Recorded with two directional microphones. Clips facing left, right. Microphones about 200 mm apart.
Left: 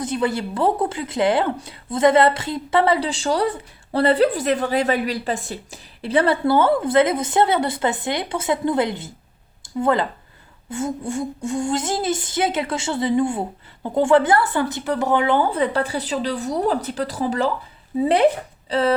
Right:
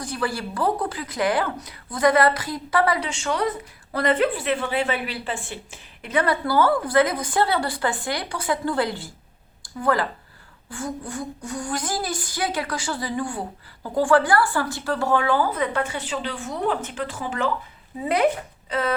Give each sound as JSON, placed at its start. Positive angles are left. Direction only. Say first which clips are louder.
{"t": 0.0, "sound": "a woman's voice", "louder": "left 5 dB", "side_deg": 20}